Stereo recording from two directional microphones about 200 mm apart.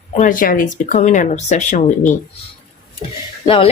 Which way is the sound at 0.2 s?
40° left (ahead or behind).